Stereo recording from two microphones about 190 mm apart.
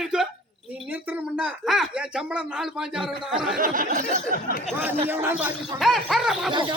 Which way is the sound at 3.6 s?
45° right (ahead or behind).